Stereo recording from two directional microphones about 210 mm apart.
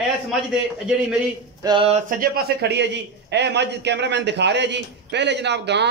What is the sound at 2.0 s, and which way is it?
A man's voice, 40° right (ahead or behind).